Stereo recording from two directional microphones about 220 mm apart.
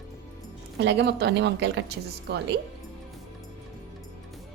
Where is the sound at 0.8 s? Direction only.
50° right (ahead or behind).